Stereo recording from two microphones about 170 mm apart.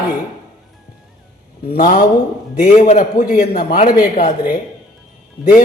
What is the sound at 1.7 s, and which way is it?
Speech, 55° left (ahead or behind).